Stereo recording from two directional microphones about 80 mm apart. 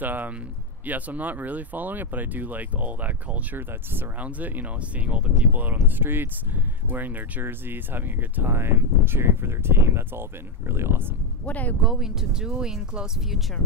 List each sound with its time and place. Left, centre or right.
0.0 s speech: right
11.4 s speech: centre
11.8 s speech: centre